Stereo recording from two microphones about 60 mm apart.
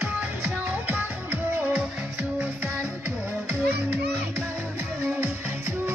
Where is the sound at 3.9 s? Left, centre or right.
Right.